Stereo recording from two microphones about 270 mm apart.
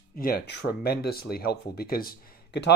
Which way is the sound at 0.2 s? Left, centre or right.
Left.